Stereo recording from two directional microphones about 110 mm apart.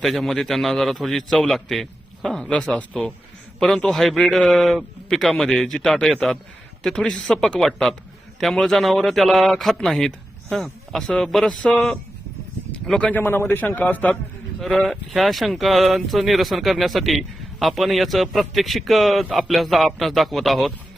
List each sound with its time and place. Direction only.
0.0 s a man's voice: centre (ahead or behind)
14.6 s speech: 5° left (ahead or behind)